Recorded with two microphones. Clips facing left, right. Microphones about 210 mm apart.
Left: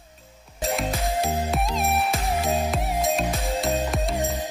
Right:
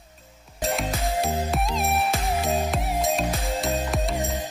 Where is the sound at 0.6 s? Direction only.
Centre (ahead or behind).